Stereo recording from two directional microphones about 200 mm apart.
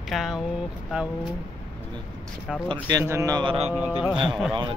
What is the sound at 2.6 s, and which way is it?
Speech, 20° right (ahead or behind).